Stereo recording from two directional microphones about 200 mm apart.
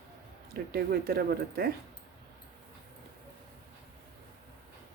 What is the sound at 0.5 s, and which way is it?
Speech, 50° right (ahead or behind).